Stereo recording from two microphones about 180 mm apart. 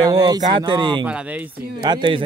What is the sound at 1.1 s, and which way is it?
Speech, 5° right (ahead or behind).